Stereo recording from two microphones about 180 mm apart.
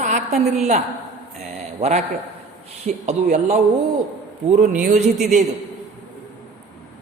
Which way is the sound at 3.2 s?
45° right (ahead or behind).